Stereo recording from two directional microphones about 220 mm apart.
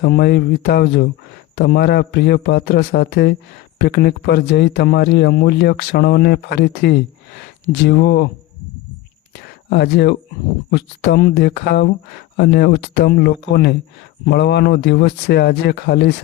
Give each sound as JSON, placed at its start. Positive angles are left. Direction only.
{"t": 0.0, "sound": "a man's voice", "side_deg": 45}
{"t": 9.3, "sound": "a sound", "side_deg": 50}
{"t": 10.7, "sound": "a man's voice", "side_deg": 50}